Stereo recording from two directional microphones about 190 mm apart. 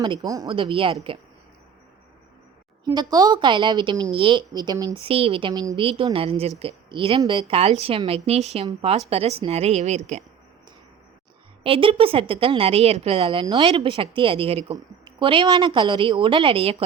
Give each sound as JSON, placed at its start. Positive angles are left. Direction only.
{"t": 0.0, "sound": "a woman's voice", "side_deg": -20}
{"t": 2.8, "sound": "a woman's voice", "side_deg": -20}
{"t": 11.6, "sound": "a woman's voice", "side_deg": -30}